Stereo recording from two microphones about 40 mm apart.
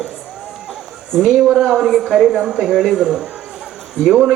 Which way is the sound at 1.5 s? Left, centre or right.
Centre.